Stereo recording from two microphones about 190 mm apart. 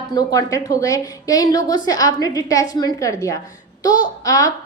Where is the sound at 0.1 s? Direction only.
20° left (ahead or behind).